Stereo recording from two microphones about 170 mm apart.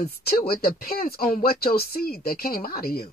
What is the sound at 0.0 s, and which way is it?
Speech, 65° left (ahead or behind).